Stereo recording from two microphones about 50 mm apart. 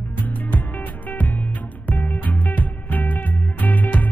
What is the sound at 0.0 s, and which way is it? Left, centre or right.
Music, left.